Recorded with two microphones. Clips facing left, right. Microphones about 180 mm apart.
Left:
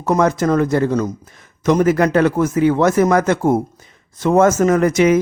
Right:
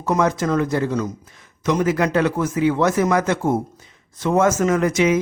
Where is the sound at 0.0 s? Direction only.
45° left (ahead or behind).